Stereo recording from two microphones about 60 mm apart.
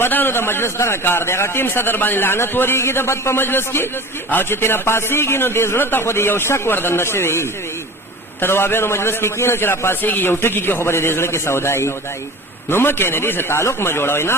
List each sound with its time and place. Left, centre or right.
0.0 s a man's voice: left